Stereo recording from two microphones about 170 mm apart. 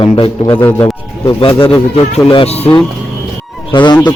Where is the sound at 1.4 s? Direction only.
30° left (ahead or behind).